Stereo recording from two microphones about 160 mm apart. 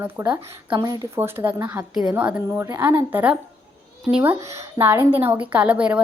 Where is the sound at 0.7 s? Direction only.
25° right (ahead or behind).